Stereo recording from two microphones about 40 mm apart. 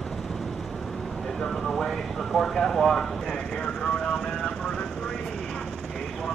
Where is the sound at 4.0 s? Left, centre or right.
Centre.